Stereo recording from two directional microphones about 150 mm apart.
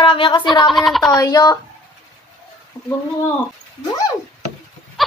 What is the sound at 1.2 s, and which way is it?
Speech, 25° left (ahead or behind).